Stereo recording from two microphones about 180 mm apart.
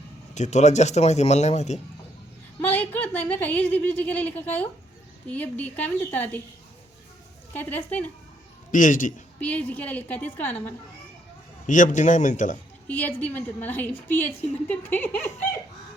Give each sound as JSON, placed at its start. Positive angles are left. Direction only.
{"t": 0.3, "sound": "speech", "side_deg": 40}
{"t": 2.6, "sound": "a woman's voice", "side_deg": 10}
{"t": 7.5, "sound": "a woman's voice", "side_deg": 10}
{"t": 8.7, "sound": "a man's voice", "side_deg": 45}
{"t": 9.4, "sound": "a woman's voice", "side_deg": 10}
{"t": 11.6, "sound": "a man's voice", "side_deg": 45}
{"t": 12.9, "sound": "a woman's voice", "side_deg": 10}